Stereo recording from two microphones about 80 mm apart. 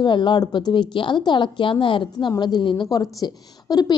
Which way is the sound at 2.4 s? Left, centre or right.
Left.